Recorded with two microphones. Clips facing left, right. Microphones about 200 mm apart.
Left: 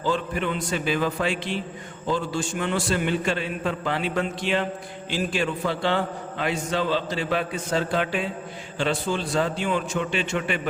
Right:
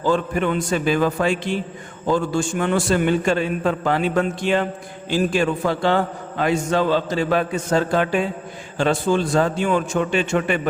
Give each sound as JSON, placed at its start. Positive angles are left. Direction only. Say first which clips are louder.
{"t": 0.0, "sound": "a man's voice", "louder": "right 6 dB", "side_deg": -50}